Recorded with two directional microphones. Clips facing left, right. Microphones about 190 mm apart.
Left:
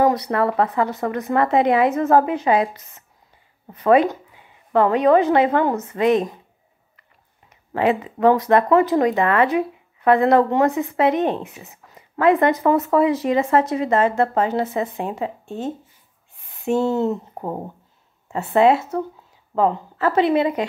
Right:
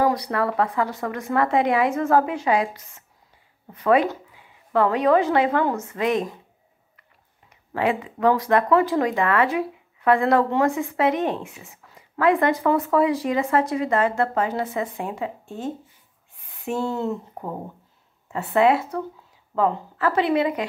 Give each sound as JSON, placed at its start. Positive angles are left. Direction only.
{"t": 0.0, "sound": "speech", "side_deg": 25}
{"t": 7.7, "sound": "a woman's voice", "side_deg": 25}